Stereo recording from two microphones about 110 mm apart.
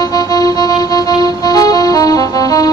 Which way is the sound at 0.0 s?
35° left (ahead or behind).